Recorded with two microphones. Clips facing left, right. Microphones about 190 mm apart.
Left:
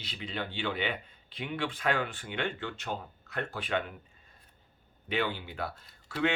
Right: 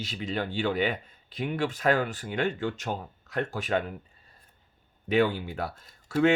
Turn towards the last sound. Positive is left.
turn(degrees=-45)  # may be behind; listen again after turning